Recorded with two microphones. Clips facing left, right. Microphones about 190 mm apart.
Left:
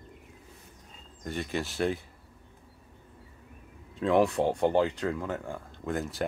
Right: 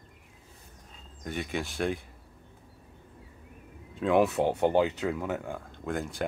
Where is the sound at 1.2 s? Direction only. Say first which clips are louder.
Left 1 dB; centre (ahead or behind).